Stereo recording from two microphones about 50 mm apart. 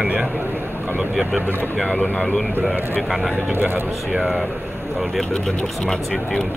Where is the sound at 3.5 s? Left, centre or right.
Right.